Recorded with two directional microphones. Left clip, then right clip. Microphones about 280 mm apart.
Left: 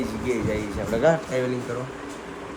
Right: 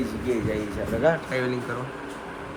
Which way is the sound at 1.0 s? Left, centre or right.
Left.